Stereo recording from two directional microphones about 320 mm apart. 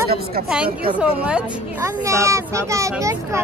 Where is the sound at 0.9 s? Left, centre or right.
Centre.